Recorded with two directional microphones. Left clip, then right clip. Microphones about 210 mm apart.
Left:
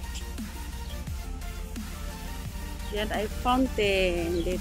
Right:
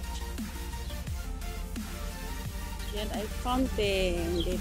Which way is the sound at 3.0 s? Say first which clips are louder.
Left 6 dB; centre (ahead or behind).